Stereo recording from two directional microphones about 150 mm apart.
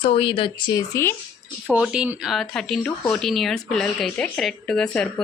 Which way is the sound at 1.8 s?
5° right (ahead or behind).